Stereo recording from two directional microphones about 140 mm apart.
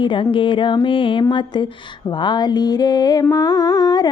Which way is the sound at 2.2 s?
30° left (ahead or behind).